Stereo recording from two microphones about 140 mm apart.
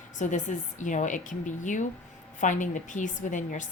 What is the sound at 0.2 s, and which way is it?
A woman's voice, 60° left (ahead or behind).